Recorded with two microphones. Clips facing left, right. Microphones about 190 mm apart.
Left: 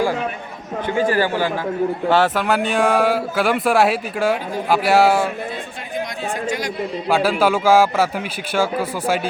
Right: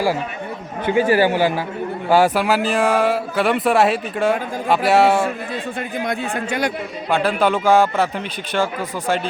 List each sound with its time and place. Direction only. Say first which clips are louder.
1.1 s a man's voice: right 3 dB; 15° right (ahead or behind)
6.1 s a man's voice: right 1 dB; 60° right (ahead or behind)
7.1 s speech: left 1 dB; 5° left (ahead or behind)